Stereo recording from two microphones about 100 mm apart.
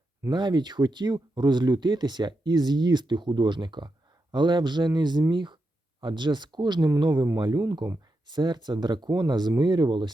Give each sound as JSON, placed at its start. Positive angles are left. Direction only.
{"t": 0.3, "sound": "speech", "side_deg": -45}